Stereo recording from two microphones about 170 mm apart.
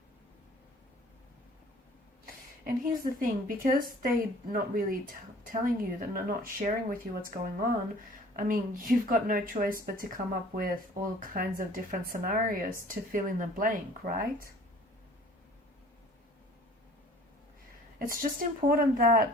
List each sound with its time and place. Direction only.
2.2 s a woman's voice: 55° right (ahead or behind)
11.2 s a woman's voice: 55° right (ahead or behind)
18.0 s a woman's voice: 55° right (ahead or behind)